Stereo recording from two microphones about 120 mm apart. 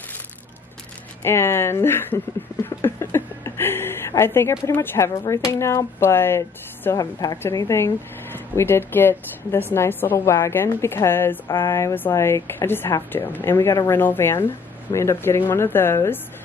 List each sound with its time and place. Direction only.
1.2 s a woman's voice: 20° left (ahead or behind)